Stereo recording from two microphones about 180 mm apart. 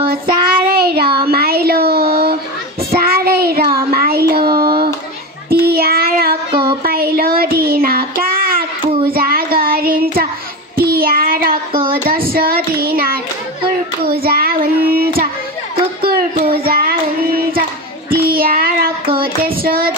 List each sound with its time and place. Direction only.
0.0 s child singing: 60° right (ahead or behind)
1.2 s a sound: 60° right (ahead or behind)
2.9 s child singing: 60° right (ahead or behind)
3.7 s a sound: 55° right (ahead or behind)
5.5 s child singing: 60° right (ahead or behind)
6.5 s music: 25° right (ahead or behind)
6.8 s child singing: 55° right (ahead or behind)
16.4 s a sound: 55° right (ahead or behind)
18.1 s child singing: 55° right (ahead or behind)